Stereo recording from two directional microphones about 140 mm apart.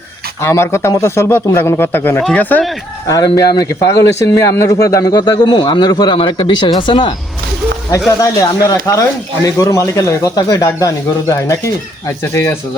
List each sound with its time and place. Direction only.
0.4 s a man's voice: 20° left (ahead or behind)
3.1 s a man's voice: 25° left (ahead or behind)
7.9 s a man's voice: 20° left (ahead or behind)